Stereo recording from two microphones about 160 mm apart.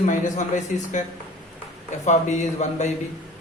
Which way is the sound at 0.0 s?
50° left (ahead or behind).